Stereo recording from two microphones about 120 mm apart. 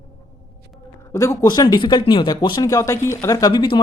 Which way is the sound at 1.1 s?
25° left (ahead or behind).